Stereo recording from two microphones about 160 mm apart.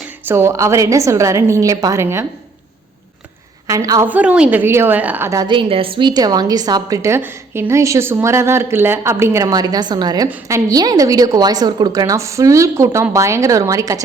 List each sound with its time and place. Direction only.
0.3 s a woman's voice: 15° right (ahead or behind)
3.7 s a woman's voice: 20° right (ahead or behind)
4.1 s a woman's voice: 10° right (ahead or behind)
5.5 s a woman's voice: 35° right (ahead or behind)